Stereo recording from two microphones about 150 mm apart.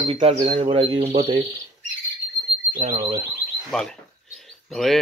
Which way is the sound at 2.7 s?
45° right (ahead or behind).